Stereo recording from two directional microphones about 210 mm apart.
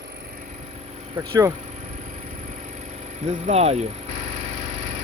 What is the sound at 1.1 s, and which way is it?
Speech, 20° right (ahead or behind).